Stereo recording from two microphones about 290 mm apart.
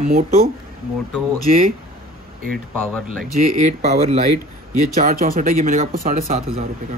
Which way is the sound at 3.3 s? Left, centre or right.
Right.